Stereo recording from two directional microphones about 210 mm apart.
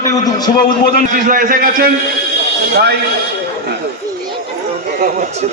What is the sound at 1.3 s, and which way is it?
Speech, 40° right (ahead or behind).